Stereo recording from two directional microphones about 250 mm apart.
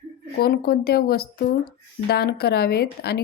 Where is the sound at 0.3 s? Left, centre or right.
Left.